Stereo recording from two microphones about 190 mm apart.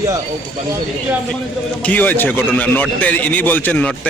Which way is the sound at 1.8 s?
10° left (ahead or behind).